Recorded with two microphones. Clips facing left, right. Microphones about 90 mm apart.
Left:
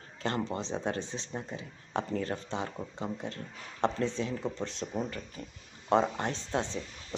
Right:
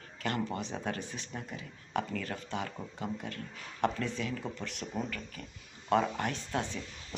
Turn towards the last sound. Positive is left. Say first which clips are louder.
# left 2 dB
turn(degrees=25)  # may be behind; listen again after turning